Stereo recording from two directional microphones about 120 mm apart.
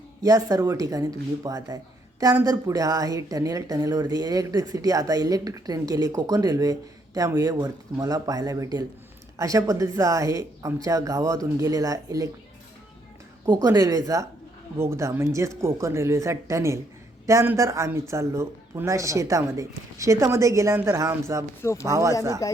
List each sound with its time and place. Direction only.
0.2 s speech: 30° right (ahead or behind)
13.5 s speech: 30° right (ahead or behind)
21.6 s speech: 25° left (ahead or behind)
21.8 s speech: 25° right (ahead or behind)
22.4 s speech: 25° left (ahead or behind)